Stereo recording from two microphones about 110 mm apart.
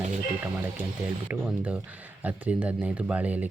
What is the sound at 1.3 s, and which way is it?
Speech, 10° right (ahead or behind).